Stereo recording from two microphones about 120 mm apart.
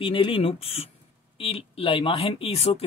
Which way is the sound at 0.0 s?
45° left (ahead or behind).